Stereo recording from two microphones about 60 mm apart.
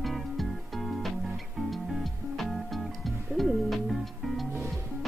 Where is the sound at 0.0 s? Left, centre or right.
Centre.